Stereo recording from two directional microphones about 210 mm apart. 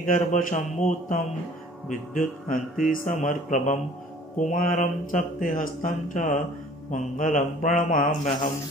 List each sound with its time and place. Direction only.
0.0 s speech: 40° left (ahead or behind)